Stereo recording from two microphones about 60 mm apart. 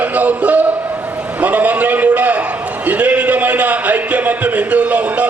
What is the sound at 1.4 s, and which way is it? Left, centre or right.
A man's voice, right.